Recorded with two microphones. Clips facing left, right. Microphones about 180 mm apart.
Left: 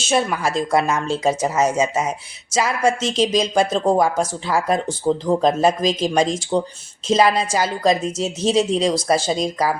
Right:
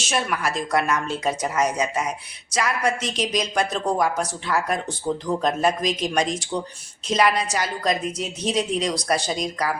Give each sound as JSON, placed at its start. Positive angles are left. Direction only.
{"t": 0.0, "sound": "speech", "side_deg": 25}